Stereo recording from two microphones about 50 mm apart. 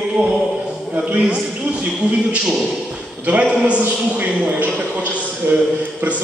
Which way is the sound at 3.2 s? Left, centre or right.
Right.